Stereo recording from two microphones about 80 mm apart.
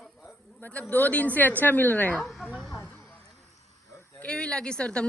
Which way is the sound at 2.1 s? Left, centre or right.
Centre.